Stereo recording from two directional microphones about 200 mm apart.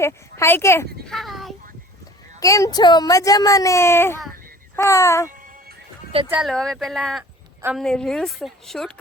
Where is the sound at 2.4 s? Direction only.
15° left (ahead or behind).